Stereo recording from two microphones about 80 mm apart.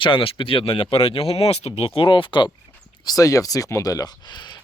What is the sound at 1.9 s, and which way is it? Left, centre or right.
Speech, left.